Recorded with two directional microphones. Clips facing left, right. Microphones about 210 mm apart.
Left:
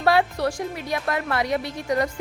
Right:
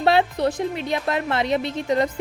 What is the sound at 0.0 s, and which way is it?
A woman's voice, 25° right (ahead or behind).